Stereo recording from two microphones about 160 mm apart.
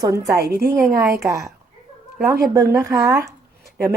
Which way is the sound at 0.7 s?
15° right (ahead or behind).